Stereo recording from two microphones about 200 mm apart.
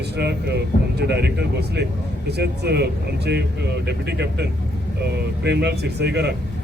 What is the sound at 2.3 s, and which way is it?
Speech, 55° right (ahead or behind).